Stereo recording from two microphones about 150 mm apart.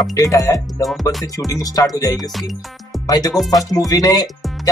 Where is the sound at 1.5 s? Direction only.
25° left (ahead or behind).